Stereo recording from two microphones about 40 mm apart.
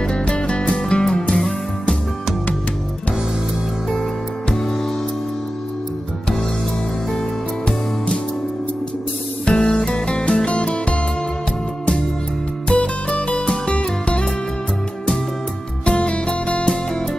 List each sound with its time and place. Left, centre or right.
0.0 s music: left
9.5 s music: left
12.6 s music: left
15.8 s music: left